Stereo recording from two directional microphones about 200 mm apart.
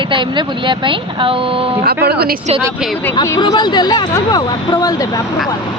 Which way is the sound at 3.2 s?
20° left (ahead or behind).